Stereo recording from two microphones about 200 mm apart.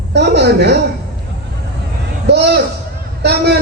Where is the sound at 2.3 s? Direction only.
55° right (ahead or behind).